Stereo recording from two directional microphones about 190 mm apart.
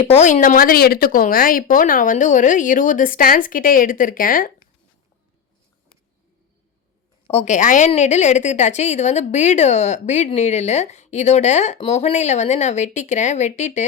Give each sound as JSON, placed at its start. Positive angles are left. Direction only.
{"t": 0.0, "sound": "speech", "side_deg": 35}
{"t": 7.3, "sound": "a woman's voice", "side_deg": 35}